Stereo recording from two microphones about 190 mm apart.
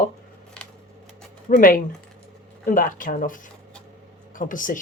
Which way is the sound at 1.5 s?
40° left (ahead or behind).